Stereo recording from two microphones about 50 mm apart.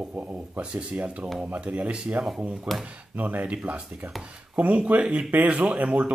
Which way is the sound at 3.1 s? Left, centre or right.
Right.